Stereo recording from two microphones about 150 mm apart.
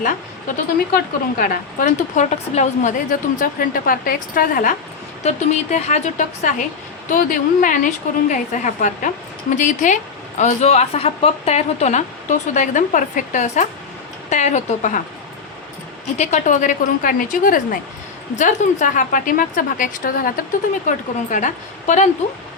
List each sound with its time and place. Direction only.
0.9 s speech: 80° left
2.3 s a woman's voice: 50° left (ahead or behind); by 4.7 s 70° left (ahead or behind)
5.2 s a woman's voice: 50° left (ahead or behind)
7.1 s a woman's voice: 65° left (ahead or behind)
16.1 s a woman's voice: 50° left (ahead or behind); by 17.7 s 65° left (ahead or behind)
18.3 s a woman's voice: 55° left (ahead or behind); by 20.4 s 75° left (ahead or behind)
20.8 s a woman's voice: 60° left (ahead or behind)